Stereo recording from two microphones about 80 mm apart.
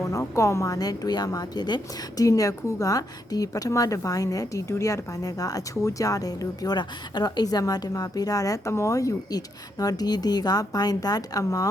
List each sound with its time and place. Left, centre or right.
0.0 s speech: left
2.2 s speech: left